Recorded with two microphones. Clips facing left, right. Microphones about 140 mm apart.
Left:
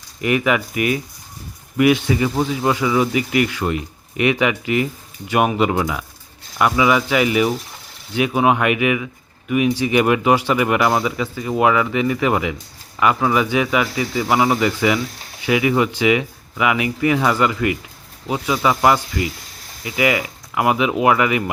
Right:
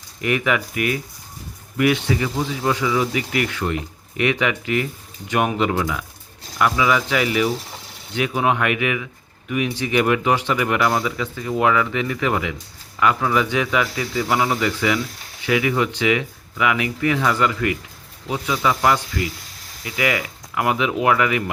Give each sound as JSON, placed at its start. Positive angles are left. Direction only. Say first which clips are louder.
{"t": 0.2, "sound": "a man's voice", "louder": "left 3 dB", "side_deg": 20}
{"t": 20.0, "sound": "a man's voice", "louder": "left 4 dB", "side_deg": 20}